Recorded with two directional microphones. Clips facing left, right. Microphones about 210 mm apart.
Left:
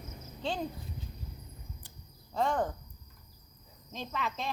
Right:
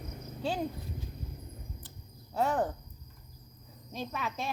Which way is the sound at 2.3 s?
10° right (ahead or behind).